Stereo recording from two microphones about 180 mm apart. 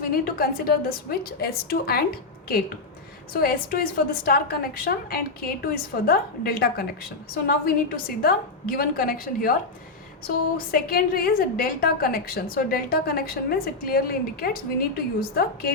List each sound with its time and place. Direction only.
0.1 s a woman's voice: 55° left (ahead or behind)
10.7 s a woman's voice: 55° left (ahead or behind)